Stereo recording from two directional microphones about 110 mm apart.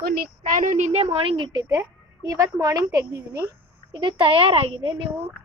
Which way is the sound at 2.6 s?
30° right (ahead or behind).